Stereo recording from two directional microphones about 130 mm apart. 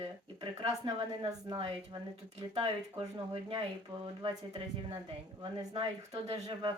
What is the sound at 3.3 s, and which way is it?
Speech, 45° right (ahead or behind).